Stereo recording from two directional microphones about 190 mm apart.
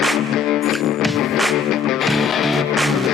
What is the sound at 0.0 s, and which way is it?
Music, centre (ahead or behind).